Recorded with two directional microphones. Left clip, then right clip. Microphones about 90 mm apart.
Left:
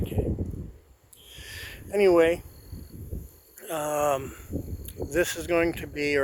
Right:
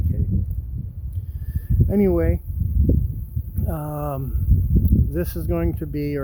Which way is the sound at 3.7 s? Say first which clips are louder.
Left 4 dB; 10° right (ahead or behind).